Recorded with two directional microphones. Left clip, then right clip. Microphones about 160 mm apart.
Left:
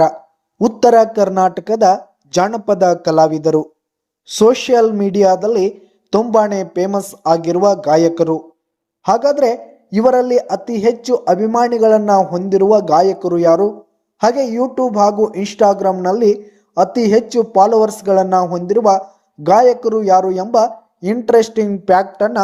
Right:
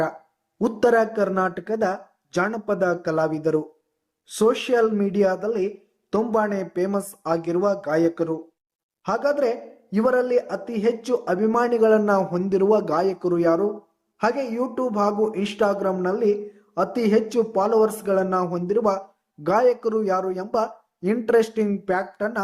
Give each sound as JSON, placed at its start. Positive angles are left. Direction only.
{"t": 0.6, "sound": "a man's voice", "side_deg": 15}
{"t": 21.8, "sound": "speech", "side_deg": 35}